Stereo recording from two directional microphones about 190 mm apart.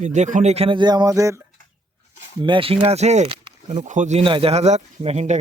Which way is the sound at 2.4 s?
25° right (ahead or behind).